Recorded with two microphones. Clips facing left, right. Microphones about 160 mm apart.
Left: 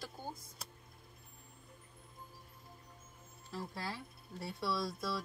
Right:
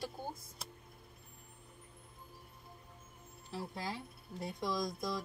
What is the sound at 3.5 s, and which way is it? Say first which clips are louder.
Speech: right 1 dB; 15° right (ahead or behind).